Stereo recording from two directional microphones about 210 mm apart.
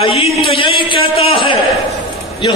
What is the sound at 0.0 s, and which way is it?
Speech, 25° left (ahead or behind).